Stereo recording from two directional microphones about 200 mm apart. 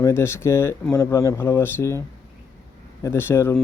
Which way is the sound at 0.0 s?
10° left (ahead or behind).